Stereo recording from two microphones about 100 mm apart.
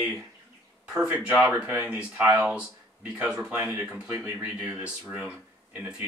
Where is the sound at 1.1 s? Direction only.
10° right (ahead or behind).